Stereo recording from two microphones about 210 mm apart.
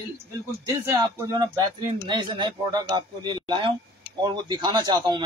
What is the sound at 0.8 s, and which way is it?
A man's voice, 15° right (ahead or behind).